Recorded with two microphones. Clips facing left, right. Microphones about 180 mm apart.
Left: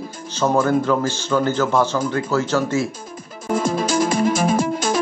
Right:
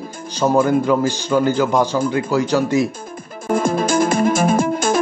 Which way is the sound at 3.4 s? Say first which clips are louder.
Right 3 dB; 55° right (ahead or behind).